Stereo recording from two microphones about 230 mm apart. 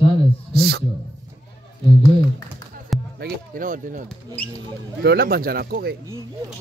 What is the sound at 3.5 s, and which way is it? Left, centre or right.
Speech, right.